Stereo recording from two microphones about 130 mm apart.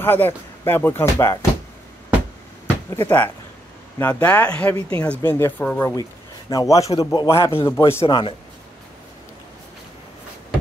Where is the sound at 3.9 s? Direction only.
10° left (ahead or behind).